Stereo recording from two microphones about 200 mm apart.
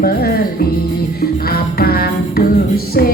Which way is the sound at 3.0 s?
50° left (ahead or behind).